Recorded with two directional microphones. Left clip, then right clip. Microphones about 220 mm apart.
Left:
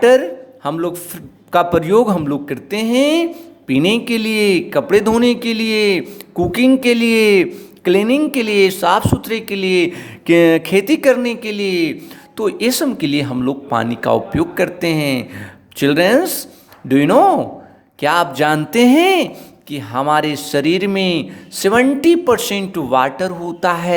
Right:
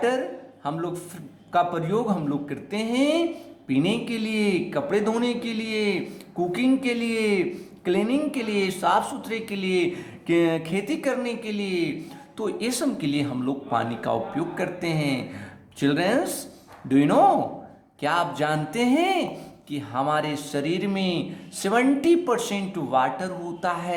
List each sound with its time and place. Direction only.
0.0 s a man's voice: 40° left (ahead or behind)